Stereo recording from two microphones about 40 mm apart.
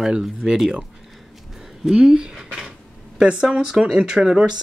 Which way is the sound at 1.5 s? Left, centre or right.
Centre.